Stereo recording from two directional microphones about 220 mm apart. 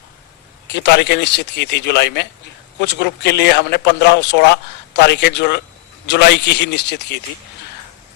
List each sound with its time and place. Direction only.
0.7 s speech: 50° left (ahead or behind)